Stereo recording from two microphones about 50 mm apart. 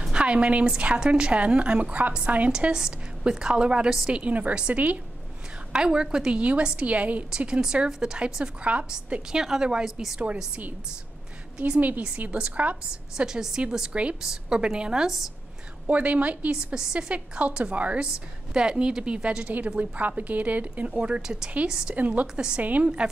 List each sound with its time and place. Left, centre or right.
0.1 s a woman's voice: right
2.7 s a woman's voice: centre
4.1 s a woman's voice: right
7.2 s a woman's voice: centre
13.1 s a woman's voice: centre
15.9 s a woman's voice: right
16.5 s a woman's voice: centre
17.1 s a woman's voice: right
19.8 s speech: right
20.9 s a woman's voice: right
21.9 s speech: right
22.2 s a woman's voice: centre
22.6 s speech: right